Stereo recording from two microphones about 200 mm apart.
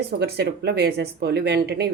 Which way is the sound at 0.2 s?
55° right (ahead or behind).